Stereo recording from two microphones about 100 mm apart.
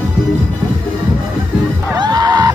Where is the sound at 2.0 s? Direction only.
40° right (ahead or behind).